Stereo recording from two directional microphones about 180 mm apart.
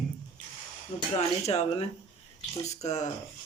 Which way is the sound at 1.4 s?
35° left (ahead or behind).